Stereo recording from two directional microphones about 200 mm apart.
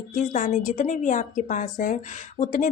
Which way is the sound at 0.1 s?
40° left (ahead or behind).